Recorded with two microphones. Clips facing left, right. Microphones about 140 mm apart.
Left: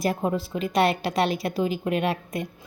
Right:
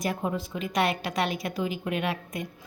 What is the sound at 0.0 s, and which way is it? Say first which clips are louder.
A woman's voice: left 4 dB; 35° left (ahead or behind).